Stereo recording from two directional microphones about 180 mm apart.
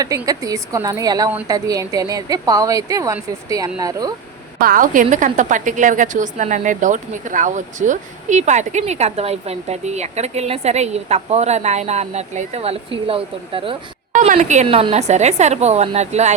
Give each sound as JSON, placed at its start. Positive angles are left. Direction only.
{"t": 0.3, "sound": "a woman's voice", "side_deg": -20}
{"t": 4.6, "sound": "a woman's voice", "side_deg": -50}
{"t": 14.1, "sound": "a woman's voice", "side_deg": -45}